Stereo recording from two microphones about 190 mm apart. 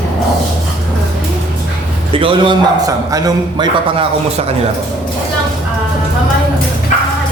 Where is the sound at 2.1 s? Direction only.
25° right (ahead or behind).